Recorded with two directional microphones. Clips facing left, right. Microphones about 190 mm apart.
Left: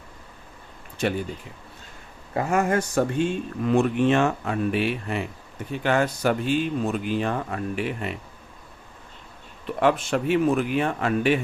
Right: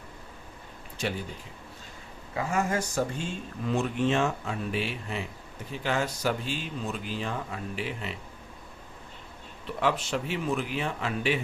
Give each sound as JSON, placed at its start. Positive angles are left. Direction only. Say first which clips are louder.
{"t": 2.3, "sound": "speech", "louder": "left 6 dB", "side_deg": 60}
{"t": 9.8, "sound": "speech", "louder": "left 7 dB", "side_deg": 55}